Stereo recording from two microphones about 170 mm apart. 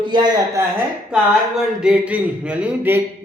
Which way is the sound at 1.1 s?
5° right (ahead or behind).